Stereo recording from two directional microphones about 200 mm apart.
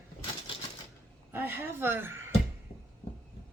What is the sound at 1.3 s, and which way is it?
Speech, 10° right (ahead or behind).